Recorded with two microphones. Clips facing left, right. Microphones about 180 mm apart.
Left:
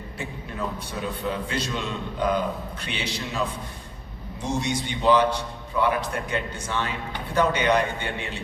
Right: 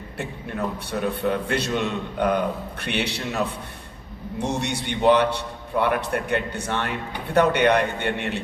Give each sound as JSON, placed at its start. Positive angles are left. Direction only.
{"t": 0.2, "sound": "a man's voice", "side_deg": -65}